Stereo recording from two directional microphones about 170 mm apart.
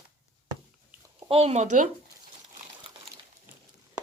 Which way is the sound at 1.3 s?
40° right (ahead or behind).